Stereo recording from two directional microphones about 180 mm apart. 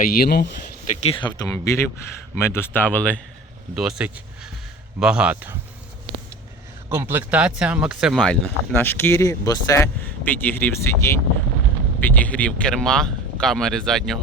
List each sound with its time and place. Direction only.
0.0 s speech: 55° left (ahead or behind)
1.2 s speech: 25° left (ahead or behind)
3.8 s speech: 5° right (ahead or behind)
6.1 s vehicle: 25° right (ahead or behind)
6.9 s speech: 15° right (ahead or behind)